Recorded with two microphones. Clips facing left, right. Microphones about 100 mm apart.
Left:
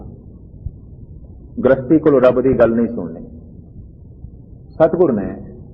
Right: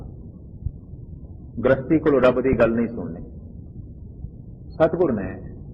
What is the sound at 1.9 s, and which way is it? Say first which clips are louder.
A man's voice: left 6 dB; 25° left (ahead or behind).